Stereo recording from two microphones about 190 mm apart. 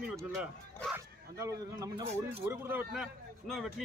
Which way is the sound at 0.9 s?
15° right (ahead or behind).